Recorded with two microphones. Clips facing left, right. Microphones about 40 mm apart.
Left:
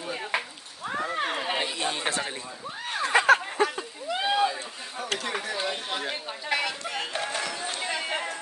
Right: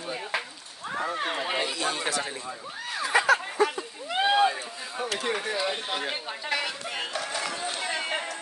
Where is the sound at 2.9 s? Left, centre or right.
Left.